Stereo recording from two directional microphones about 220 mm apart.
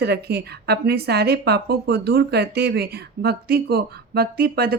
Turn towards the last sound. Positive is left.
turn(degrees=-45)  # may be behind; listen again after turning